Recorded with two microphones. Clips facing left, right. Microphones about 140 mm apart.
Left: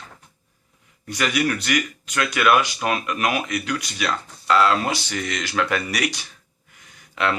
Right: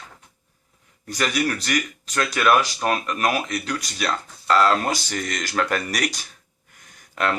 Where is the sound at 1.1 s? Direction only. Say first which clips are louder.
Left 1 dB; 40° right (ahead or behind).